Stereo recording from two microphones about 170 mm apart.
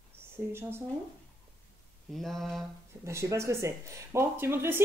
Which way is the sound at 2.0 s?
Centre (ahead or behind).